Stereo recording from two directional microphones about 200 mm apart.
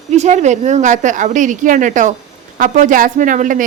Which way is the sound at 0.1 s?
35° right (ahead or behind).